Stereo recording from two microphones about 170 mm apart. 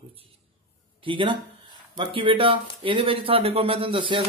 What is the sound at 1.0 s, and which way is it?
A man's voice, 30° right (ahead or behind).